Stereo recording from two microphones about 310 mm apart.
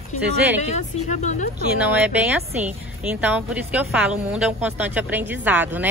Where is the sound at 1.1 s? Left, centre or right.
Left.